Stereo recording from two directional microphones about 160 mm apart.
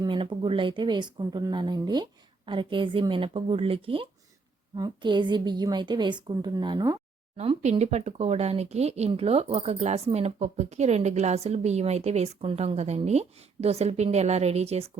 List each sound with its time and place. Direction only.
0.0 s a woman's voice: 30° right (ahead or behind)
7.3 s speech: 40° right (ahead or behind)